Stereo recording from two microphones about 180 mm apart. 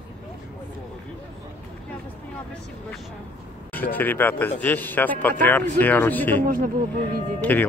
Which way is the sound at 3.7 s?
10° left (ahead or behind).